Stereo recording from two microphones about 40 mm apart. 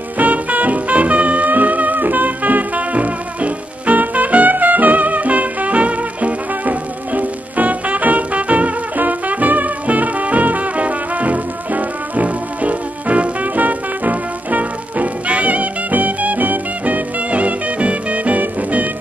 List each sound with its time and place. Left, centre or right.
0.2 s music: right